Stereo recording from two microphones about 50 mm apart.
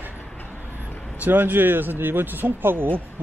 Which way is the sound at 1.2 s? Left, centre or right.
Right.